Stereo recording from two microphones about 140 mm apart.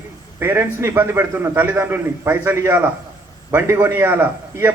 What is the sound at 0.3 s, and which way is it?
A man's voice, 15° right (ahead or behind).